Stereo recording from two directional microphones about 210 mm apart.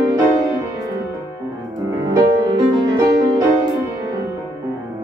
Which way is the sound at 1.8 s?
15° right (ahead or behind).